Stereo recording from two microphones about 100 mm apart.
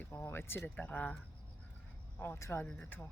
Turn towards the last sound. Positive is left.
turn(degrees=20)  # may be behind; listen again after turning